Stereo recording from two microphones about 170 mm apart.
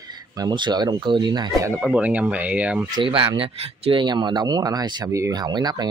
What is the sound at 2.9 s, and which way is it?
Speech, 30° right (ahead or behind).